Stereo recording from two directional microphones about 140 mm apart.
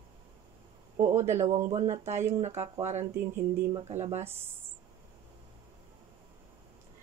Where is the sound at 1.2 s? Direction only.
55° right (ahead or behind).